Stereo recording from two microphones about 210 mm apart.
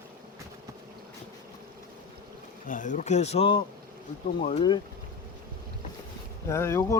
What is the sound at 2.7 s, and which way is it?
Speech, 40° left (ahead or behind).